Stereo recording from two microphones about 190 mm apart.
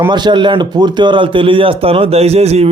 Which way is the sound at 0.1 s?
25° right (ahead or behind).